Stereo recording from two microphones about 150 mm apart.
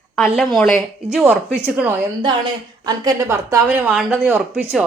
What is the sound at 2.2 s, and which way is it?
A woman's voice, 25° right (ahead or behind).